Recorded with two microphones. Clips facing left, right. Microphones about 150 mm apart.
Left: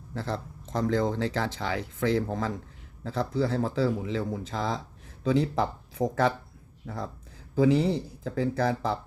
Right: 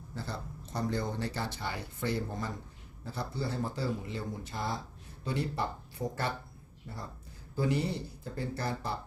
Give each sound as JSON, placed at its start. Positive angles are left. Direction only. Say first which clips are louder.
{"t": 0.1, "sound": "speech", "louder": "left 8 dB", "side_deg": 85}